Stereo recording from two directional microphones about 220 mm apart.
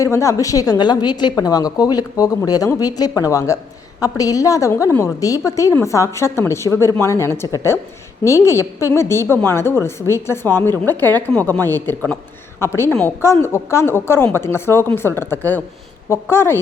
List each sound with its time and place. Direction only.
0.0 s a woman's voice: 15° left (ahead or behind)